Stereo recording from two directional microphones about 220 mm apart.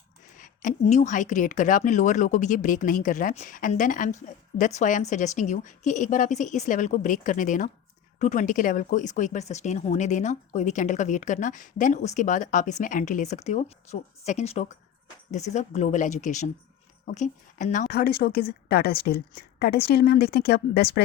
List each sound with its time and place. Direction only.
0.3 s a woman's voice: 35° left (ahead or behind)